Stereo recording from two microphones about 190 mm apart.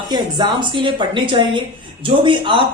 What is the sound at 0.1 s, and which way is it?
A man's voice, 20° right (ahead or behind).